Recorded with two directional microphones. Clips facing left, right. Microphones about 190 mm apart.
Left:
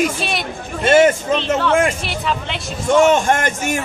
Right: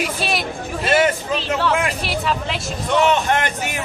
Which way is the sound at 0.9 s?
45° left (ahead or behind).